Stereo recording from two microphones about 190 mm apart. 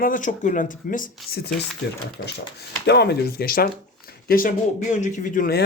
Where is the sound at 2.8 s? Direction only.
60° left (ahead or behind).